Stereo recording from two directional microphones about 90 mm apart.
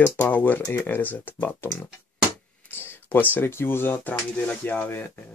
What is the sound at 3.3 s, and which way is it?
Speech, 25° left (ahead or behind).